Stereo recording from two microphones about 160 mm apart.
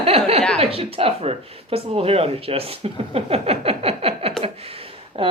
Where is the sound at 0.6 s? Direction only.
35° right (ahead or behind).